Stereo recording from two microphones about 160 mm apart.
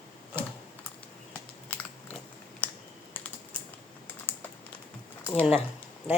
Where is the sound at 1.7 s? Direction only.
10° left (ahead or behind).